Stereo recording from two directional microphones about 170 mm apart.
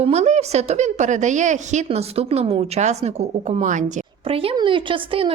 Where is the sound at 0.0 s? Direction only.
40° right (ahead or behind).